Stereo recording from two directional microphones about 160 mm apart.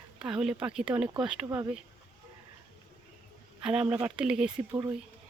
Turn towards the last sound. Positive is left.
turn(degrees=-20)  # may be behind; listen again after turning